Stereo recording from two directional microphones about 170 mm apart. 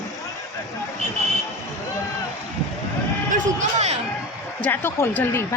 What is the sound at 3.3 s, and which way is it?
Speech, 45° right (ahead or behind).